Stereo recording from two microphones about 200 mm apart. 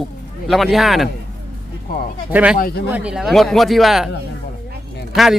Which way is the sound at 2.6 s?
50° left (ahead or behind).